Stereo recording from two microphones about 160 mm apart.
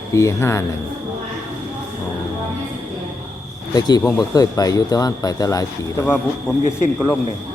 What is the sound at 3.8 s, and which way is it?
Speech, 25° left (ahead or behind).